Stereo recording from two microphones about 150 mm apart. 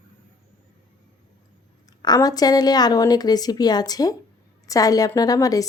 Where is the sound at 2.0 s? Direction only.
25° left (ahead or behind).